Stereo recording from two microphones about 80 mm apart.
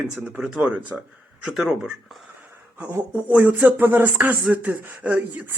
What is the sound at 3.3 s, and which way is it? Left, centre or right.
Speech, centre.